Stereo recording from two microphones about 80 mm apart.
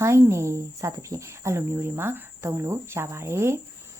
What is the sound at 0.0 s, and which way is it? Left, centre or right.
A woman's voice, right.